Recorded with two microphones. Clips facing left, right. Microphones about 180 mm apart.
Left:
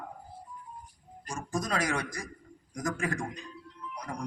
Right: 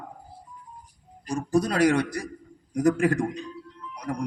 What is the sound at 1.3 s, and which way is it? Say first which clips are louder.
A man's voice: right 9 dB; 65° right (ahead or behind).